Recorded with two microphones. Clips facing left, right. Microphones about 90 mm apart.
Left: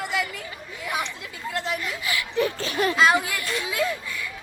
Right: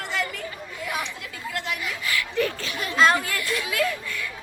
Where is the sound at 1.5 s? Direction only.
25° left (ahead or behind).